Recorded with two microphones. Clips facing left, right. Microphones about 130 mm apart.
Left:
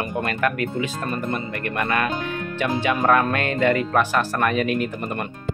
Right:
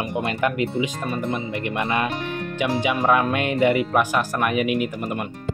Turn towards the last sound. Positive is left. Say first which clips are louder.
# right 1 dB
turn(degrees=-10)  # may be behind; listen again after turning